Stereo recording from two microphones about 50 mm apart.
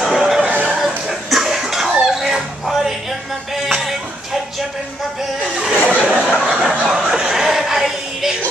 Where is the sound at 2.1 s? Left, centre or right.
Centre.